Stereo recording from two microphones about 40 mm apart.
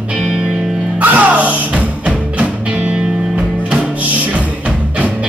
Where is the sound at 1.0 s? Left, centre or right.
Right.